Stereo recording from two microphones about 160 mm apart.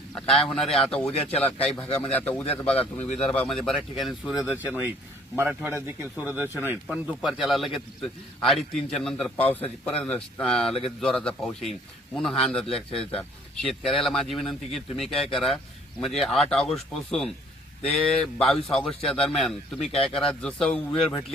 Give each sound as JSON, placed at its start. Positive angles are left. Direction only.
{"t": 0.1, "sound": "a man's voice", "side_deg": 5}
{"t": 1.3, "sound": "a man's voice", "side_deg": 40}
{"t": 2.0, "sound": "a man's voice", "side_deg": 10}
{"t": 4.5, "sound": "a man's voice", "side_deg": -10}